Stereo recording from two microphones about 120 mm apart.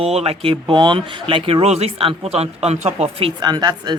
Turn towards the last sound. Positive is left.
turn(degrees=-35)  # may be behind; listen again after turning